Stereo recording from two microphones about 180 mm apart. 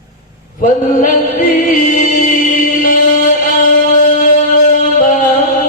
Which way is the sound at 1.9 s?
50° left (ahead or behind).